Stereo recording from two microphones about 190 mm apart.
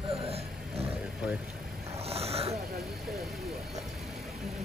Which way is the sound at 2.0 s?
30° right (ahead or behind).